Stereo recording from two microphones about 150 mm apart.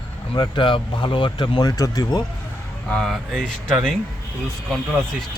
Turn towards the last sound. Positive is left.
turn(degrees=0)  # may be behind; listen again after turning